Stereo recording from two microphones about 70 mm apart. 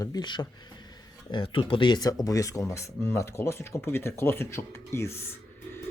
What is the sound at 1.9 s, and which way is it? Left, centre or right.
Speech, left.